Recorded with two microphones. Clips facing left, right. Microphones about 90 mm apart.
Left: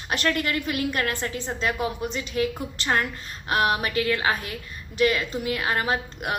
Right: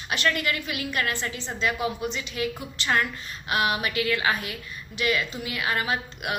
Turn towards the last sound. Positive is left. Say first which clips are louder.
# left 2 dB
turn(degrees=40)  # may be behind; listen again after turning